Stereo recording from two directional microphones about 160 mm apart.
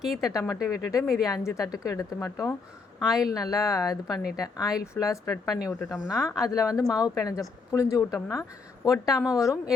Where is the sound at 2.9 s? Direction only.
Centre (ahead or behind).